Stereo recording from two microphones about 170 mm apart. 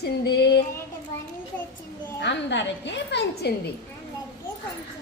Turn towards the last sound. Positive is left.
turn(degrees=85)